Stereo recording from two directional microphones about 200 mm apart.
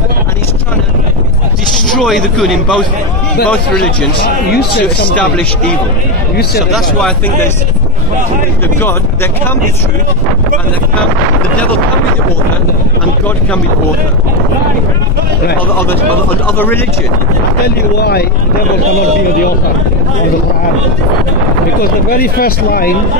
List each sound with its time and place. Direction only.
2.0 s a man's voice: centre (ahead or behind)
4.2 s speech: 50° left (ahead or behind)
6.7 s a man's voice: 5° left (ahead or behind)
16.5 s speech: 10° left (ahead or behind)
17.6 s speech: 50° left (ahead or behind)
22.1 s speech: 50° left (ahead or behind)